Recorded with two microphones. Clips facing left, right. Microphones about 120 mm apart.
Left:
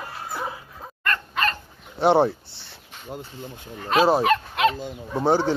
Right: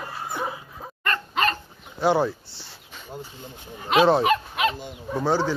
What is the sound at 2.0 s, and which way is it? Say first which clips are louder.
Speech: left 3 dB; 25° left (ahead or behind).